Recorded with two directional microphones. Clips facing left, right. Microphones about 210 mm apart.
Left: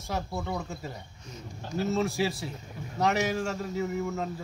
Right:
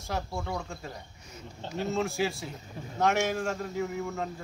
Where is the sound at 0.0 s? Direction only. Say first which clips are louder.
Left 1 dB; centre (ahead or behind).